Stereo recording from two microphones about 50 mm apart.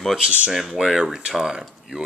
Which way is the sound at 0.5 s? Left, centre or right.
Centre.